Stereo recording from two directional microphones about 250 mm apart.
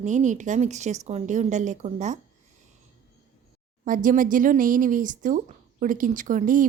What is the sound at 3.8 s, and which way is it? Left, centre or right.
Speech, right.